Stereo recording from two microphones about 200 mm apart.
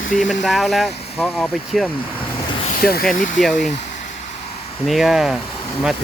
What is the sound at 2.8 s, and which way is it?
Speech, 50° left (ahead or behind).